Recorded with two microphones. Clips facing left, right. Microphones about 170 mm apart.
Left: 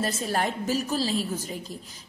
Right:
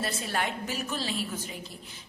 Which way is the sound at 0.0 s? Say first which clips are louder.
Left 4 dB; 40° left (ahead or behind).